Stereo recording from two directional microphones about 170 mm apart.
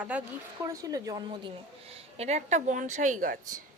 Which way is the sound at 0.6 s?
20° right (ahead or behind).